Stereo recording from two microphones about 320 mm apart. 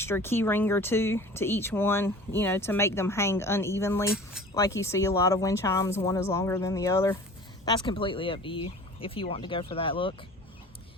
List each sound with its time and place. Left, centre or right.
0.0 s speech: centre